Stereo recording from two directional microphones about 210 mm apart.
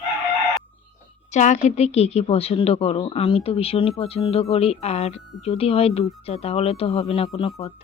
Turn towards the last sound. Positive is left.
turn(degrees=30)  # may be behind; listen again after turning